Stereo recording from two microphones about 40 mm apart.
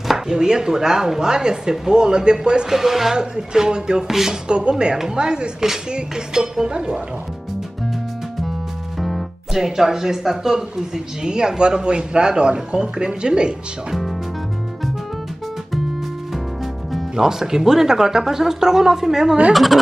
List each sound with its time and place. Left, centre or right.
0.3 s speech: centre
2.7 s speech: centre
4.1 s speech: centre
4.5 s speech: right
9.0 s music: centre
9.6 s speech: centre
17.1 s speech: centre
19.5 s speech: centre